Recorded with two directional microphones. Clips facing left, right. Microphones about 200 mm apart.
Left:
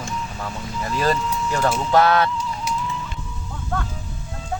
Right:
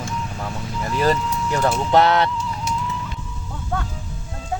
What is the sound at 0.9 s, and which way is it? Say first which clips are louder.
Speech: right 2 dB; 15° right (ahead or behind).